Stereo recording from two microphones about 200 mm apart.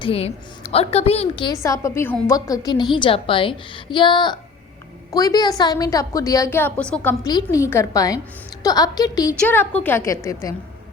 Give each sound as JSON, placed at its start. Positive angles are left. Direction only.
{"t": 0.0, "sound": "a woman's voice", "side_deg": 30}
{"t": 1.6, "sound": "a woman's voice", "side_deg": 15}
{"t": 9.4, "sound": "a woman's voice", "side_deg": 10}